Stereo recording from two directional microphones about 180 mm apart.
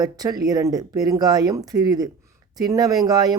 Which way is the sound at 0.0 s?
20° right (ahead or behind).